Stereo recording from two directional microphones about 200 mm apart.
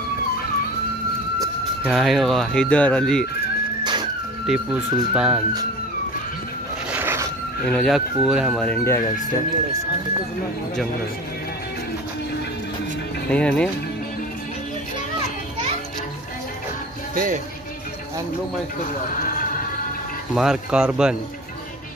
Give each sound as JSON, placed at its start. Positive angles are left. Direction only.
{"t": 1.9, "sound": "speech", "side_deg": 0}
{"t": 3.8, "sound": "music", "side_deg": -20}
{"t": 5.1, "sound": "speech", "side_deg": -5}
{"t": 6.9, "sound": "a sound", "side_deg": -10}
{"t": 7.6, "sound": "speech", "side_deg": 0}
{"t": 8.6, "sound": "speech", "side_deg": 15}
{"t": 13.3, "sound": "speech", "side_deg": 5}
{"t": 17.1, "sound": "speech", "side_deg": -45}
{"t": 20.3, "sound": "speech", "side_deg": -5}